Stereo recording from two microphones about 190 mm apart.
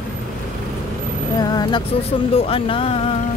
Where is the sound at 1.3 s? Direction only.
20° left (ahead or behind).